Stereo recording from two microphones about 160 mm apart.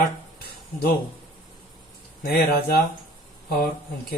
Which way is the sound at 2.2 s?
70° left (ahead or behind).